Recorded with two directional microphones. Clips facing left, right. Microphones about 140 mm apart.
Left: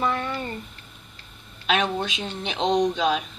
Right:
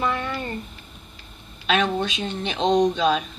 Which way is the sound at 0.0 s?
Centre (ahead or behind).